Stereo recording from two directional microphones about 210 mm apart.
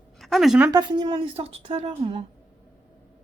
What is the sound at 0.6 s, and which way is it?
A woman's voice, 20° right (ahead or behind).